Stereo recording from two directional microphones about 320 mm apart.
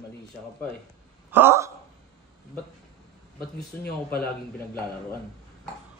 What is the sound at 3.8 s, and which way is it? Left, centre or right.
Speech, left.